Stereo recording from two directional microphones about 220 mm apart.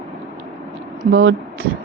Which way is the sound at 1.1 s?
55° right (ahead or behind).